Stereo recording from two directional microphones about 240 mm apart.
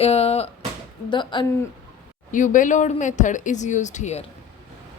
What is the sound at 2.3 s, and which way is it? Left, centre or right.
Speech, left.